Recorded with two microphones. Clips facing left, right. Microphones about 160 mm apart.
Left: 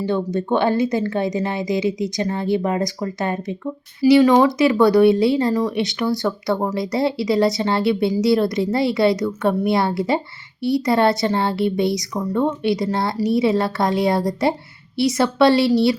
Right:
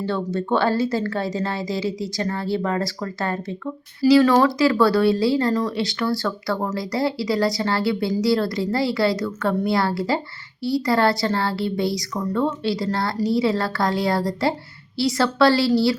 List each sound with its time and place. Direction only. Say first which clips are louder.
0.0 s speech: left 3 dB; 15° left (ahead or behind)